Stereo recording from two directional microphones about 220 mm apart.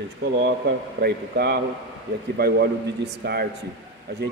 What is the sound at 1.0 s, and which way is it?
Speech, 45° right (ahead or behind).